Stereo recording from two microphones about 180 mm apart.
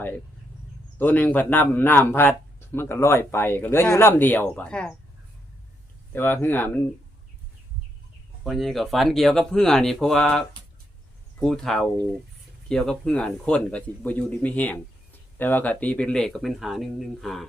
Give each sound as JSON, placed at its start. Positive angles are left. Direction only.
{"t": 0.9, "sound": "a man's voice", "side_deg": 10}
{"t": 6.1, "sound": "a man's voice", "side_deg": 10}
{"t": 8.4, "sound": "a man's voice", "side_deg": 0}